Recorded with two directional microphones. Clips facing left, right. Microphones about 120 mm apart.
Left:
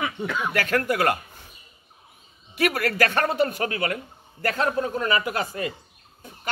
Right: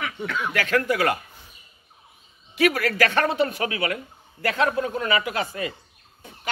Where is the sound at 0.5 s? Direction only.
40° left (ahead or behind).